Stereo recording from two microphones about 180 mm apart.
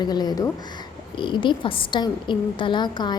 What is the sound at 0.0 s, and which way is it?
A woman's voice, 25° left (ahead or behind).